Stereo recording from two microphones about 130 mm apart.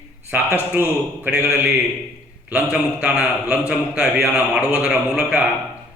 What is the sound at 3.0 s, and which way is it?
A man's voice, 5° right (ahead or behind).